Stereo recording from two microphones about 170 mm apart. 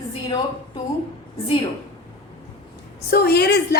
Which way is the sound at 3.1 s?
65° left (ahead or behind).